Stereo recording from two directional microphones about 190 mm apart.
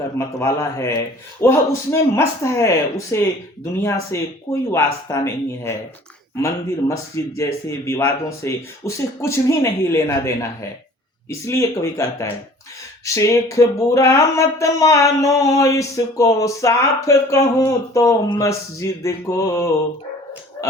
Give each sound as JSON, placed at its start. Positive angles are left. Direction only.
{"t": 0.2, "sound": "speech", "side_deg": 15}